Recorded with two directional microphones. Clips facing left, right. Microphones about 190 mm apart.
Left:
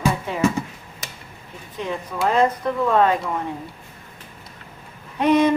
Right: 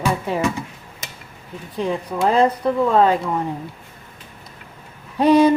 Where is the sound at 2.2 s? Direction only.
30° right (ahead or behind).